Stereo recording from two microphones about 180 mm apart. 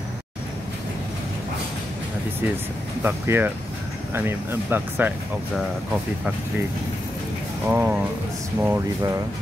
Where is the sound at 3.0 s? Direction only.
10° right (ahead or behind).